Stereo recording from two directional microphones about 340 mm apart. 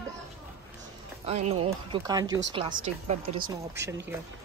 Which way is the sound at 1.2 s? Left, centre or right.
Centre.